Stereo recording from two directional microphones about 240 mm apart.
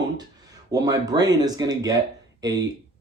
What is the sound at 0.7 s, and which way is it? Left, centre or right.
Speech, centre.